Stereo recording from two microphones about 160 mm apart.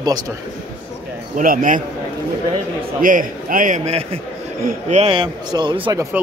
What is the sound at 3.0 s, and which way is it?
Speech, 55° right (ahead or behind).